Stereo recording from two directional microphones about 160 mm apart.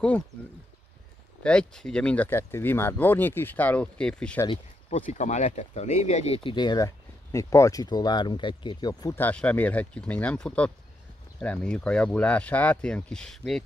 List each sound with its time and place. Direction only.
1.4 s speech: 5° left (ahead or behind)
4.8 s speech: 45° left (ahead or behind); by 9.1 s 30° left (ahead or behind)
9.1 s speech: 10° left (ahead or behind)